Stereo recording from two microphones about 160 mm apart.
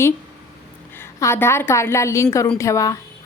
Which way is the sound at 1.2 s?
15° left (ahead or behind).